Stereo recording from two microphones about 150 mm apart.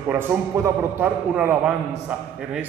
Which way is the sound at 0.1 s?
15° right (ahead or behind).